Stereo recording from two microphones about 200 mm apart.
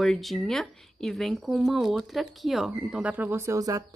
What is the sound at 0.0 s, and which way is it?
Speech, centre (ahead or behind).